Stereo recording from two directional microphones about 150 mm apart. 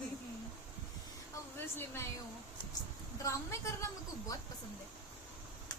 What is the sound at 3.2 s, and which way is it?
A woman's voice, 20° left (ahead or behind).